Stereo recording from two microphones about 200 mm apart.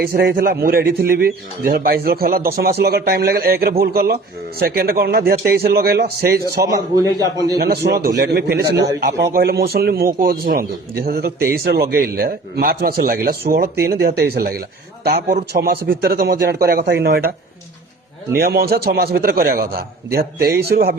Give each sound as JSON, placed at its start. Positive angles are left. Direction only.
{"t": 0.0, "sound": "a man's voice", "side_deg": -50}
{"t": 6.7, "sound": "a man's voice", "side_deg": -15}
{"t": 7.6, "sound": "a man's voice", "side_deg": -55}
{"t": 18.3, "sound": "a man's voice", "side_deg": -50}